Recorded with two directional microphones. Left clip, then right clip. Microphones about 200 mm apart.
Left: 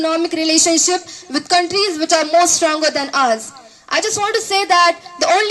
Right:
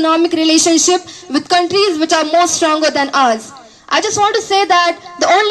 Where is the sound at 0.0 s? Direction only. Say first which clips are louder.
Right 5 dB; 30° left (ahead or behind).